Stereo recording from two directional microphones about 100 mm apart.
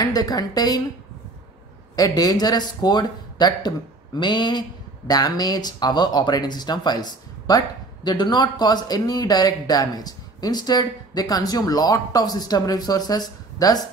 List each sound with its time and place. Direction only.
0.0 s speech: 40° left (ahead or behind)
2.0 s speech: 40° left (ahead or behind)